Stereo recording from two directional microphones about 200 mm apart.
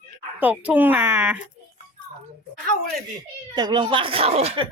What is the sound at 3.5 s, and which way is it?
Speech, 20° right (ahead or behind).